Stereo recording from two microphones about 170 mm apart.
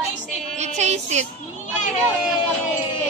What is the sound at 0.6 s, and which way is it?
Speech, 40° right (ahead or behind).